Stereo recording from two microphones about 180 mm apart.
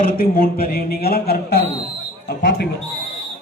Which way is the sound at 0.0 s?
55° left (ahead or behind).